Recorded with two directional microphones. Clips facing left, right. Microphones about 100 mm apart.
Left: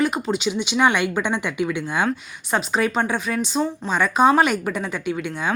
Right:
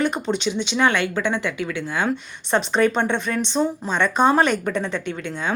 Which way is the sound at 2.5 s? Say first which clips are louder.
Right 3 dB; 5° left (ahead or behind).